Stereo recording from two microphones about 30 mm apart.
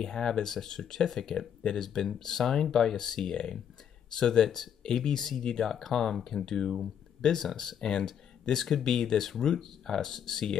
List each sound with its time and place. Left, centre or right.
0.0 s speech: left